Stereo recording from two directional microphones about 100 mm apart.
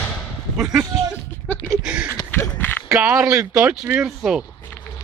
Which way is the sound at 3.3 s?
35° right (ahead or behind).